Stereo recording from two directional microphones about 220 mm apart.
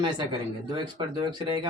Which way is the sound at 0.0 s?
20° right (ahead or behind).